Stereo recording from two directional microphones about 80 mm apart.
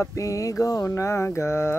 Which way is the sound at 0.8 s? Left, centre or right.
Left.